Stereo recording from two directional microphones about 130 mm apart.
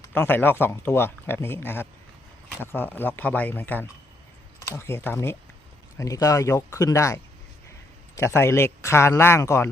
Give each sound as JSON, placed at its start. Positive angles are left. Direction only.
{"t": 0.1, "sound": "speech", "side_deg": 15}